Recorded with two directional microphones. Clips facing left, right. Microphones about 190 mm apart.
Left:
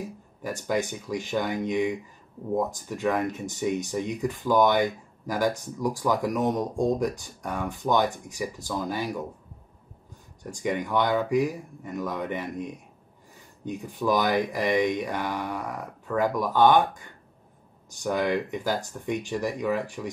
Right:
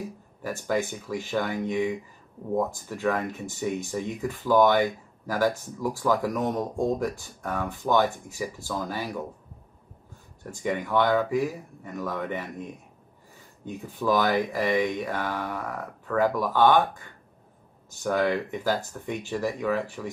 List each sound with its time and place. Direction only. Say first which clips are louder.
0.4 s speech: even; 15° left (ahead or behind)
10.4 s speech: left 1 dB; 15° left (ahead or behind)